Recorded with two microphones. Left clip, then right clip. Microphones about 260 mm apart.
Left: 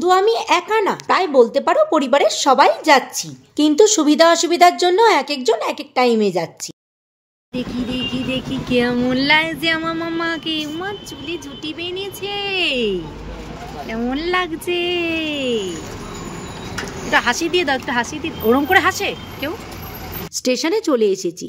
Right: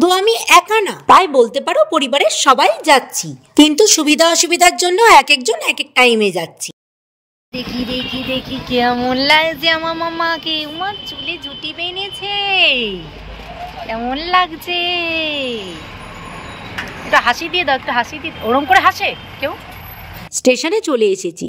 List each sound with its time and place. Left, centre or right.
0.0 s a woman's voice: right
7.5 s speech: centre
17.1 s speech: centre
20.4 s a woman's voice: right